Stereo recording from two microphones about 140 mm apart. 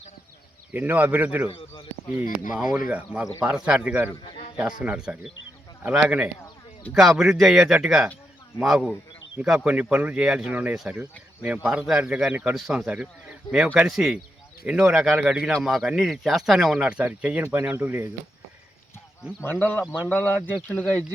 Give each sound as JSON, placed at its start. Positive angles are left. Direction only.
{"t": 0.7, "sound": "speech", "side_deg": -15}
{"t": 1.5, "sound": "speech", "side_deg": 40}
{"t": 2.5, "sound": "speech", "side_deg": -5}
{"t": 19.4, "sound": "speech", "side_deg": 15}